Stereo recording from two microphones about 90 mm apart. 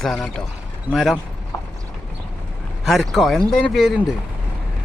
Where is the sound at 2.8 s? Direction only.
Centre (ahead or behind).